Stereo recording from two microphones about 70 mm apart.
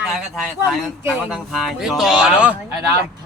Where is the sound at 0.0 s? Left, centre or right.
Centre.